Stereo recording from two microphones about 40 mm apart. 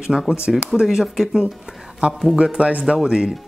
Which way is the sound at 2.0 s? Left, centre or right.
Right.